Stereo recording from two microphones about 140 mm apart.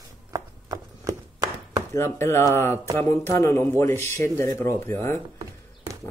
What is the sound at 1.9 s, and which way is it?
Speech, 20° left (ahead or behind).